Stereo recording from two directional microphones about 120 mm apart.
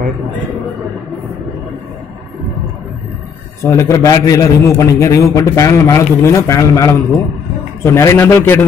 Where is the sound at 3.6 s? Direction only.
25° left (ahead or behind).